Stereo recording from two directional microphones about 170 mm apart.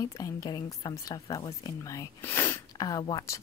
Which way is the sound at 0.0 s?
20° left (ahead or behind).